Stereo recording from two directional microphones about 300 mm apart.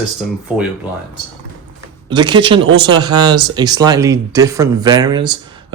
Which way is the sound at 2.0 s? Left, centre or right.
Centre.